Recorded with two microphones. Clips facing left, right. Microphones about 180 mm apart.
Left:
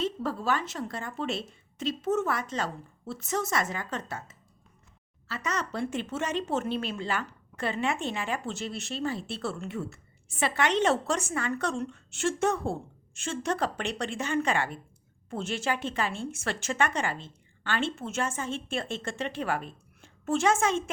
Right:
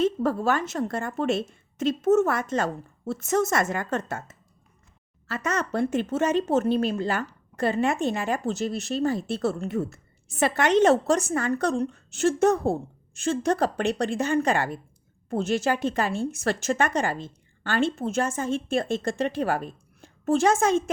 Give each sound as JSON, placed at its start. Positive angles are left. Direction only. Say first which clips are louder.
{"t": 0.0, "sound": "a woman's voice", "louder": "right 7 dB", "side_deg": -50}